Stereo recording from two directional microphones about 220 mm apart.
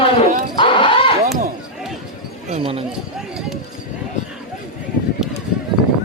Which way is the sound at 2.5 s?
25° right (ahead or behind).